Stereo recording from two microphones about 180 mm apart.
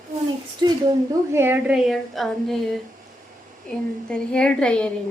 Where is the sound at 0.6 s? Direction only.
25° right (ahead or behind).